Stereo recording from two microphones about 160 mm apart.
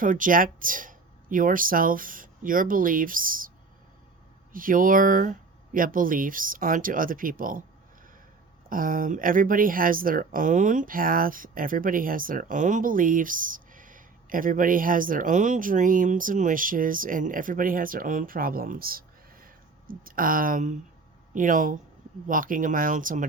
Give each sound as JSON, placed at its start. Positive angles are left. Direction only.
{"t": 0.0, "sound": "speech", "side_deg": -55}
{"t": 4.5, "sound": "speech", "side_deg": -60}
{"t": 8.7, "sound": "speech", "side_deg": -60}